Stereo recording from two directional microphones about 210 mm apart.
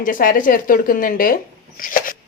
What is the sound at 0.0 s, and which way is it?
A woman's voice, 40° left (ahead or behind).